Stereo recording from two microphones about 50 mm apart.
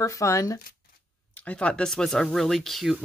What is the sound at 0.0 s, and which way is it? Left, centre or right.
Speech, left.